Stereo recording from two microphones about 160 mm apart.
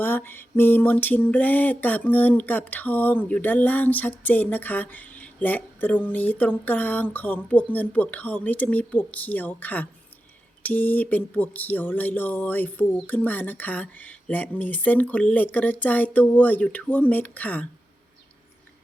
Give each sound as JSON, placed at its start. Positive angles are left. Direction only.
{"t": 0.0, "sound": "mantra", "side_deg": 15}